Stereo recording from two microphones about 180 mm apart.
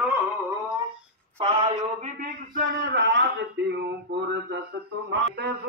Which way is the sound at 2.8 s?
80° right.